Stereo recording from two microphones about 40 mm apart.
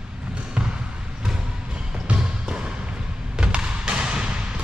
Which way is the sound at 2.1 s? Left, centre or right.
Right.